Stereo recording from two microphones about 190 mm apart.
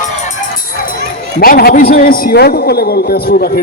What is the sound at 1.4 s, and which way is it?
A man's voice, 50° left (ahead or behind).